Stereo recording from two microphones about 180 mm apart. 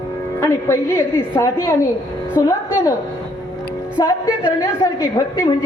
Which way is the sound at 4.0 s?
25° left (ahead or behind).